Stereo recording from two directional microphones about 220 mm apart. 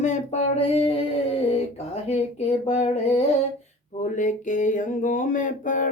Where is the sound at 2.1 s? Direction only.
30° left (ahead or behind).